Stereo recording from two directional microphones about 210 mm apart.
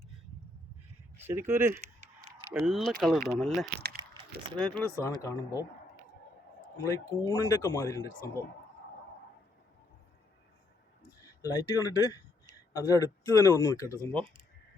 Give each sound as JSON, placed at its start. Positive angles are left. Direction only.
{"t": 1.1, "sound": "speech", "side_deg": -10}
{"t": 1.7, "sound": "honk", "side_deg": -35}
{"t": 2.5, "sound": "speech", "side_deg": 0}
{"t": 6.8, "sound": "speech", "side_deg": 15}
{"t": 11.2, "sound": "speech", "side_deg": 15}